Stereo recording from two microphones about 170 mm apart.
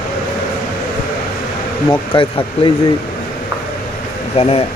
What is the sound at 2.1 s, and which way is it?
Speech, 30° left (ahead or behind).